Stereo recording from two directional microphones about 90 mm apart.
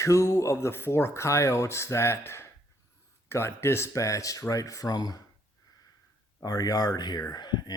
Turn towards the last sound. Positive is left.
turn(degrees=55)  # may be behind; listen again after turning